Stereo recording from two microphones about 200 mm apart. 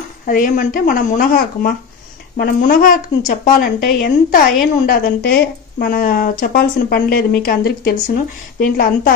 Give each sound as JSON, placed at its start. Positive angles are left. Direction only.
{"t": 0.3, "sound": "speech", "side_deg": 45}